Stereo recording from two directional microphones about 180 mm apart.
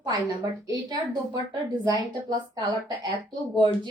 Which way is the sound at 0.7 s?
25° right (ahead or behind).